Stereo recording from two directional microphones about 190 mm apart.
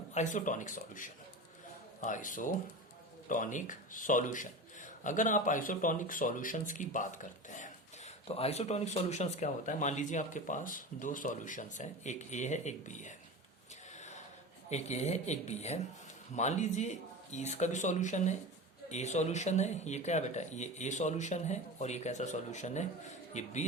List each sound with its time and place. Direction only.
0.1 s a man's voice: 40° left (ahead or behind)
14.7 s speech: 35° left (ahead or behind)